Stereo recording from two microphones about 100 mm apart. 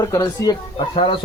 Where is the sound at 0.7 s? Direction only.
55° left (ahead or behind).